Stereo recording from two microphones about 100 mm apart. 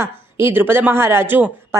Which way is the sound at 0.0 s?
25° right (ahead or behind).